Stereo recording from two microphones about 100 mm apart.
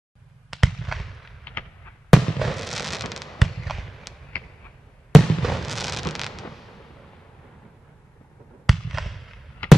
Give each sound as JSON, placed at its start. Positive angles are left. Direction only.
{"t": 0.5, "sound": "fireworks", "side_deg": 0}
{"t": 1.4, "sound": "a sound", "side_deg": 15}
{"t": 2.0, "sound": "fireworks", "side_deg": 0}
{"t": 5.1, "sound": "fireworks", "side_deg": 0}
{"t": 8.6, "sound": "fireworks", "side_deg": 0}
{"t": 9.6, "sound": "basketball bounce", "side_deg": 10}